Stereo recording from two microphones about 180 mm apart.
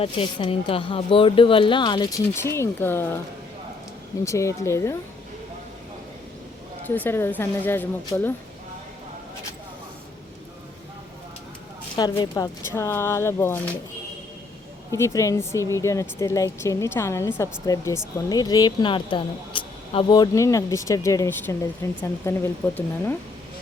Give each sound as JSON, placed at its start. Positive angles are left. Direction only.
{"t": 0.0, "sound": "speech", "side_deg": 30}
{"t": 4.2, "sound": "speech", "side_deg": 15}
{"t": 6.8, "sound": "speech", "side_deg": 10}
{"t": 11.9, "sound": "speech", "side_deg": 20}
{"t": 14.9, "sound": "speech", "side_deg": 15}